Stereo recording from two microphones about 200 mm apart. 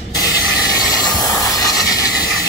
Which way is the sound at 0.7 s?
20° left (ahead or behind).